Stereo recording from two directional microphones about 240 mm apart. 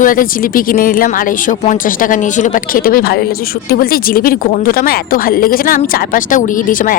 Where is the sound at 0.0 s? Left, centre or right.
Left.